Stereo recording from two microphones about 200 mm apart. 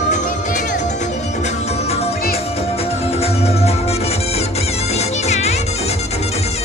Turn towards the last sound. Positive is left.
turn(degrees=30)  # may be behind; listen again after turning